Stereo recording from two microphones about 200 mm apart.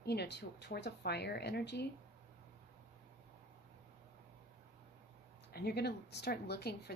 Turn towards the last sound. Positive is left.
turn(degrees=55)  # may be behind; listen again after turning